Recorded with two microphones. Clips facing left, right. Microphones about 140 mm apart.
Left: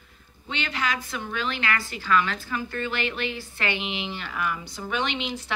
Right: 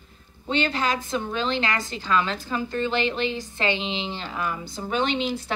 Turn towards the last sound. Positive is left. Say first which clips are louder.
# right 5 dB
turn(degrees=-35)  # may be behind; listen again after turning